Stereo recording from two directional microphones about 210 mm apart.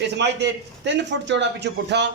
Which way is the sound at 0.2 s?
55° right (ahead or behind).